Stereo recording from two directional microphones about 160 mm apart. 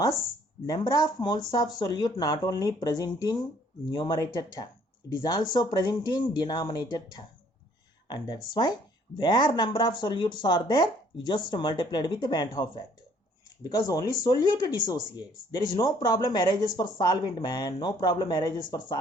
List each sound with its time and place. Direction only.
0.7 s speech: 25° left (ahead or behind)